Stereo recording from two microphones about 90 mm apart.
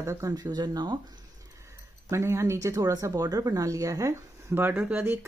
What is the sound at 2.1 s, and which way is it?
Speech, 30° right (ahead or behind).